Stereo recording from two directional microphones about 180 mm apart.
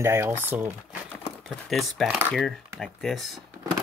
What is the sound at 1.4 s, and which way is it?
Speech, centre (ahead or behind).